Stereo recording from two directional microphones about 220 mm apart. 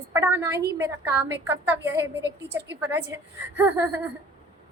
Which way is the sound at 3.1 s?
15° right (ahead or behind).